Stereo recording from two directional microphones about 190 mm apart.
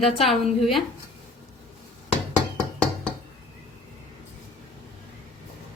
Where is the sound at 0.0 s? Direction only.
Centre (ahead or behind).